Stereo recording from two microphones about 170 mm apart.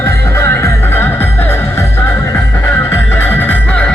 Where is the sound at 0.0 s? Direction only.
15° left (ahead or behind).